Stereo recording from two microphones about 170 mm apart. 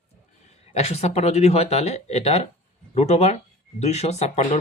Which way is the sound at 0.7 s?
40° left (ahead or behind).